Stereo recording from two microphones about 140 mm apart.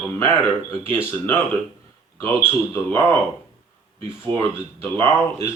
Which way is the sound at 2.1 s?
15° left (ahead or behind).